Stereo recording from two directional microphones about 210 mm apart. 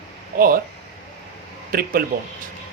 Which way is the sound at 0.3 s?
45° right (ahead or behind).